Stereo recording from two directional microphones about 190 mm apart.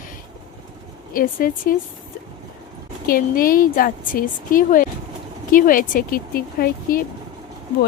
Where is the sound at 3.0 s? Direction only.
50° left (ahead or behind).